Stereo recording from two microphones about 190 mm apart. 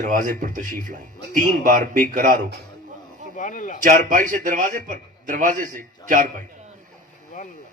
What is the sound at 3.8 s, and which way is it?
A man's voice, 45° right (ahead or behind).